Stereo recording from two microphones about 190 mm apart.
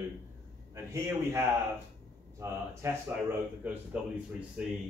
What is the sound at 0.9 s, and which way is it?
Speech, 15° right (ahead or behind).